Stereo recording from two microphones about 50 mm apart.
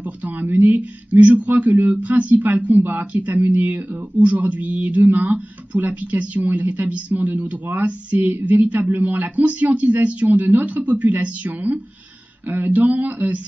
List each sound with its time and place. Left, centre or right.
0.0 s speech: right